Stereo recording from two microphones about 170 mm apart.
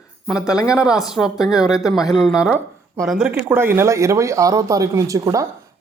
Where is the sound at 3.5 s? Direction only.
15° right (ahead or behind).